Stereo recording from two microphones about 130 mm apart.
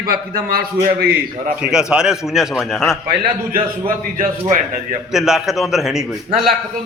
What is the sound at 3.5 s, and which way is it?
Speech, 90° right.